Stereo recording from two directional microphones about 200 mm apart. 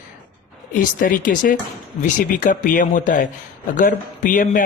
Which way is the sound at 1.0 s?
40° left (ahead or behind).